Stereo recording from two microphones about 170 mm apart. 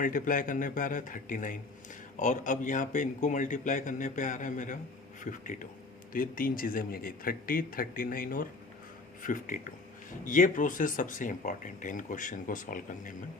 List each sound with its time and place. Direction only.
0.0 s speech: 50° left (ahead or behind)